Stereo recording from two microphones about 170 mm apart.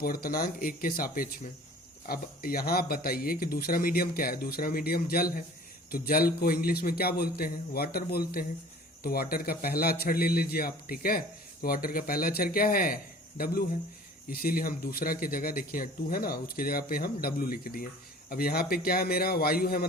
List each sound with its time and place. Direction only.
0.0 s speech: 60° left (ahead or behind)